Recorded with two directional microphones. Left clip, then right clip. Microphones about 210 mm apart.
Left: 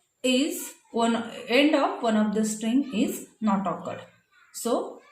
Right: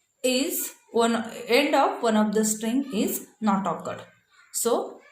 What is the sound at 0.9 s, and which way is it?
A woman's voice, 40° right (ahead or behind).